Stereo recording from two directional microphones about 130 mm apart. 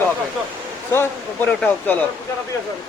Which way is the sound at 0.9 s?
20° left (ahead or behind).